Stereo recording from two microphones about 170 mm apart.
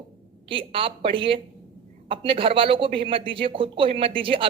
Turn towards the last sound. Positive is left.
turn(degrees=-30)  # may be behind; listen again after turning